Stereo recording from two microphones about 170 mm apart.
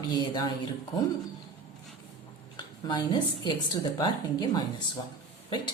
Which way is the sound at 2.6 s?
25° left (ahead or behind).